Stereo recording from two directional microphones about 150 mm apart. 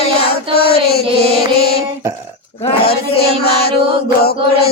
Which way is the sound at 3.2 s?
90° left.